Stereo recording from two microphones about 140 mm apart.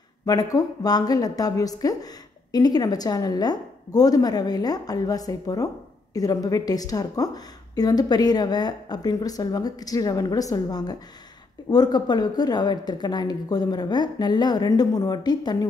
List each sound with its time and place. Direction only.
0.2 s a woman's voice: 25° left (ahead or behind)